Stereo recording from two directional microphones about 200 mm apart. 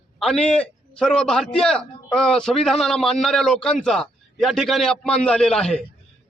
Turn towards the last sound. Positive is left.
turn(degrees=5)  # may be behind; listen again after turning